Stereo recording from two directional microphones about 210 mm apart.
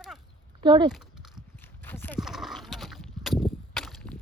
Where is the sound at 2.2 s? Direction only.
Centre (ahead or behind).